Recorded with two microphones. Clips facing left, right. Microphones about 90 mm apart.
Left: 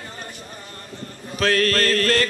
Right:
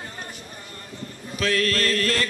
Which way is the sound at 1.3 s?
45° left (ahead or behind).